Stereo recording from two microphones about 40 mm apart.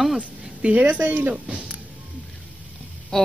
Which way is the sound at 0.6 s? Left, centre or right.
Right.